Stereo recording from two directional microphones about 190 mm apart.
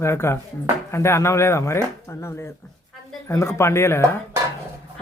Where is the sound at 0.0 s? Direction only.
15° left (ahead or behind).